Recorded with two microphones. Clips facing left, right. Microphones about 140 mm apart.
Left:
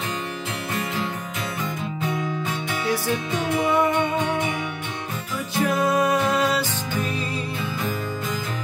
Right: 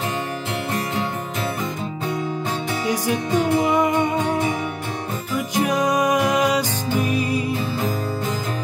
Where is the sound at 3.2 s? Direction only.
40° right (ahead or behind).